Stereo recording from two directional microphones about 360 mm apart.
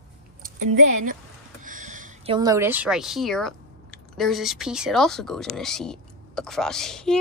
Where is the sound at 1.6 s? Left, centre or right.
Right.